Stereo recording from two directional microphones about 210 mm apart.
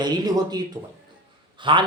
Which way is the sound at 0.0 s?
20° right (ahead or behind).